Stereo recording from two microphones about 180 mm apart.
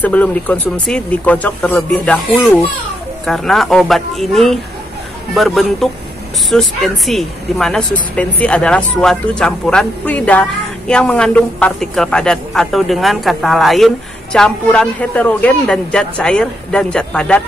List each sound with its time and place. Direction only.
0.0 s speech: 10° left (ahead or behind)